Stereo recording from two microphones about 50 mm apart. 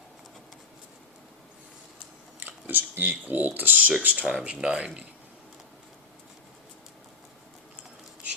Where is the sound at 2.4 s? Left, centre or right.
Right.